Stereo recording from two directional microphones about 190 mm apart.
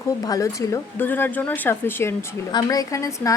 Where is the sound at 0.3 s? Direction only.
15° left (ahead or behind).